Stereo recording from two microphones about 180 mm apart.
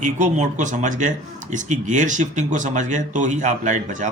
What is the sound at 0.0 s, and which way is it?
Speech, 45° right (ahead or behind).